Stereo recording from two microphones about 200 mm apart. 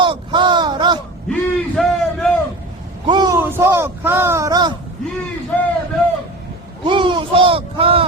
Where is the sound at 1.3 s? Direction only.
Centre (ahead or behind).